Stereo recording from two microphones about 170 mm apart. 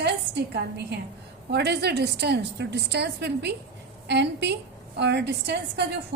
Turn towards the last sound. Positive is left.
turn(degrees=-85)